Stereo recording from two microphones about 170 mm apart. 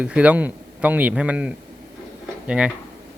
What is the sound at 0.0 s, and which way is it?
A man's voice, 10° right (ahead or behind).